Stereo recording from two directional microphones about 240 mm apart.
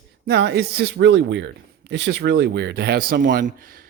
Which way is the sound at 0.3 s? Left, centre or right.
Right.